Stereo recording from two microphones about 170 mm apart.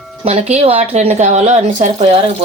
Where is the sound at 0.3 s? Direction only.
40° right (ahead or behind).